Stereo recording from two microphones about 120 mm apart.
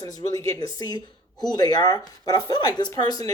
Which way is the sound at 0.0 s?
30° left (ahead or behind).